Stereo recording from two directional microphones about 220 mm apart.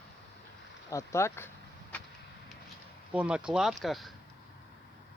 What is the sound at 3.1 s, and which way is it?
Speech, 5° right (ahead or behind).